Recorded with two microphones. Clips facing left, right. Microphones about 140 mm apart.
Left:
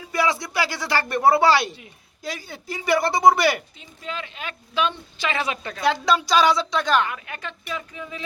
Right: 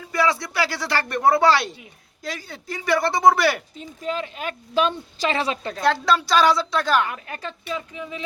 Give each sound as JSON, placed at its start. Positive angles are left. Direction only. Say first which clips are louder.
{"t": 0.0, "sound": "speech", "louder": "right 1 dB", "side_deg": 0}
{"t": 3.8, "sound": "speech", "louder": "right 6 dB", "side_deg": -40}
{"t": 5.8, "sound": "speech", "louder": "even", "side_deg": 0}
{"t": 7.1, "sound": "speech", "louder": "right 1 dB", "side_deg": -35}